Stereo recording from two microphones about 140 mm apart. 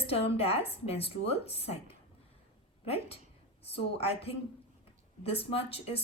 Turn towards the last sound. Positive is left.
turn(degrees=45)  # may be behind; listen again after turning